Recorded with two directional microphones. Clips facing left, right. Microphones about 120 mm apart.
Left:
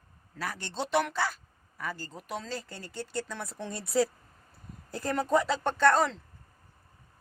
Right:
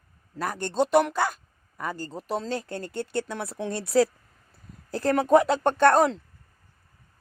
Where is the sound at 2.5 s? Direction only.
60° right (ahead or behind); by 4.1 s 90° right.